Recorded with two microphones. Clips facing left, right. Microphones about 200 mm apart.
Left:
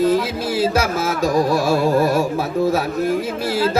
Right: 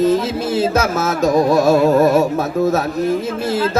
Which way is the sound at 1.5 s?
50° right (ahead or behind).